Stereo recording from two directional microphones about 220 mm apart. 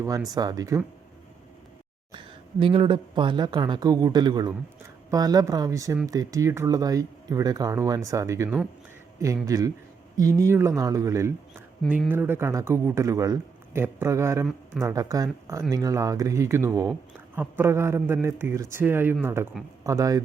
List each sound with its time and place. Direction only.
0.3 s a woman's voice: 15° right (ahead or behind)
2.1 s a woman's voice: 25° right (ahead or behind)